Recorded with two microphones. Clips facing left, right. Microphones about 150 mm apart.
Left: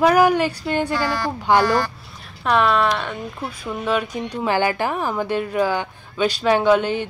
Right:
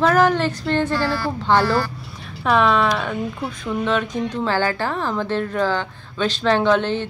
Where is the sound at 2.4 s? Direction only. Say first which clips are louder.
Right 1 dB; centre (ahead or behind).